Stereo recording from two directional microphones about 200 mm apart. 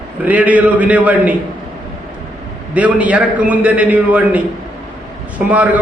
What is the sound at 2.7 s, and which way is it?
A man's voice, 5° right (ahead or behind).